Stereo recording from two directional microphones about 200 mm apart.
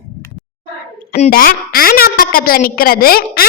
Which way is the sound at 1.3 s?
45° left (ahead or behind).